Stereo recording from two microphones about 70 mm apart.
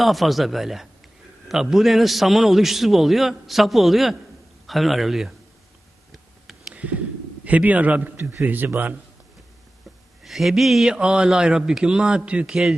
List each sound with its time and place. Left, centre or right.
0.0 s a man's voice: centre
6.1 s a sound: centre
7.4 s a man's voice: right
10.2 s a man's voice: centre
10.9 s a man's voice: centre
12.5 s a man's voice: centre